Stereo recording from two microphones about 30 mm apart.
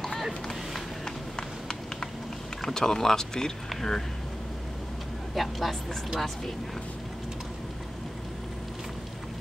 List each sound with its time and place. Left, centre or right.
2.6 s speech: centre
5.3 s a woman's voice: centre